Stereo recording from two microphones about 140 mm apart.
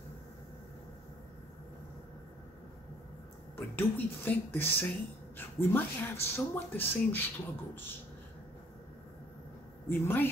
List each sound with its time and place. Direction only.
3.5 s speech: 15° left (ahead or behind)
9.8 s speech: 15° left (ahead or behind)